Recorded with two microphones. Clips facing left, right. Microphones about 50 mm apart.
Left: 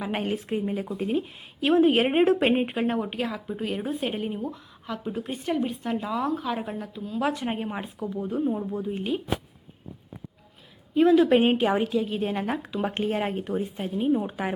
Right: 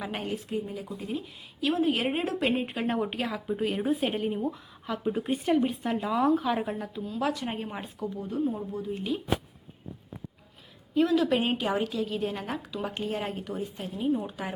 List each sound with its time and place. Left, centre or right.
0.3 s speech: left
2.8 s speech: centre
7.2 s speech: centre
10.9 s a woman's voice: left